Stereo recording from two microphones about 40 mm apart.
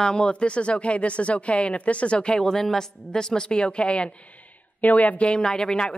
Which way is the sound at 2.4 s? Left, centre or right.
Centre.